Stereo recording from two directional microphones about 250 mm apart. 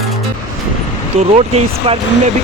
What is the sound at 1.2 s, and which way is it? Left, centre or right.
Speech, right.